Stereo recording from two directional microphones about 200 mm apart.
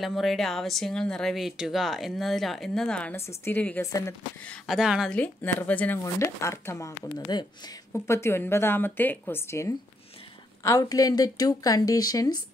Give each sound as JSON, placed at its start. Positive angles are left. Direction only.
{"t": 0.0, "sound": "speech", "side_deg": 0}
{"t": 4.6, "sound": "speech", "side_deg": -5}